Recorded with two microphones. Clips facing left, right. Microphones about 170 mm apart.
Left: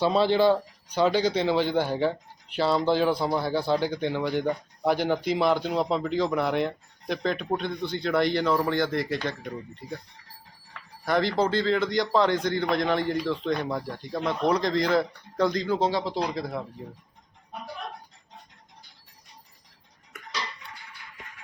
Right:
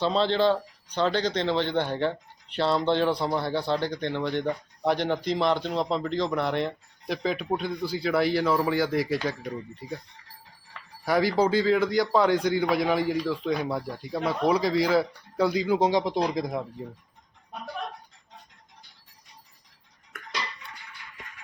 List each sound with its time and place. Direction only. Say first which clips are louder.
0.0 s a man's voice: left 2 dB; 10° left (ahead or behind); by 10.0 s 10° right (ahead or behind)
11.0 s a man's voice: right 1 dB; 10° right (ahead or behind)